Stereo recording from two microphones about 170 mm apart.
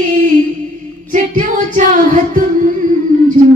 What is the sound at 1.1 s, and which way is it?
Music, 50° right (ahead or behind).